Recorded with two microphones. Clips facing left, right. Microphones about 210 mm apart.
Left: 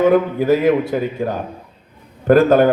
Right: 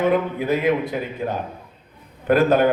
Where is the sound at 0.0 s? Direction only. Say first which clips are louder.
Left 6 dB; 45° left (ahead or behind).